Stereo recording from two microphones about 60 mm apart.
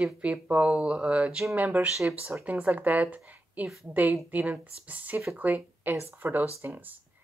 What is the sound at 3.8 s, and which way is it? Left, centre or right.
Speech, right.